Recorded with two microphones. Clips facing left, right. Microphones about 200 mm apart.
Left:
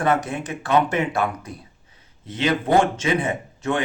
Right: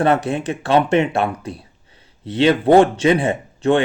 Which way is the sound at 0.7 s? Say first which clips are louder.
Right 5 dB; 70° right (ahead or behind).